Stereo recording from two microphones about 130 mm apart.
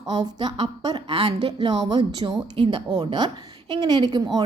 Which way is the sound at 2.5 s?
45° right (ahead or behind).